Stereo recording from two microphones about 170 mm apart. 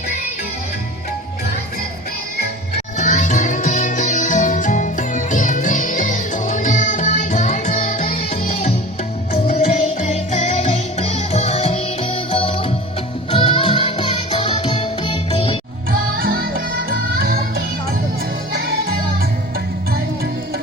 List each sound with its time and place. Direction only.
3.0 s music: 45° left (ahead or behind)
15.9 s music: 60° right (ahead or behind)